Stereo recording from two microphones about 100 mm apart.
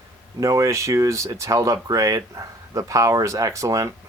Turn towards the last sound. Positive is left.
turn(degrees=-30)  # may be behind; listen again after turning